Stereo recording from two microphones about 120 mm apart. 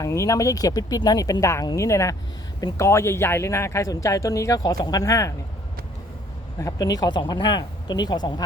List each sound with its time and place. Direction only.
0.0 s speech: 25° left (ahead or behind)
6.6 s speech: 30° left (ahead or behind)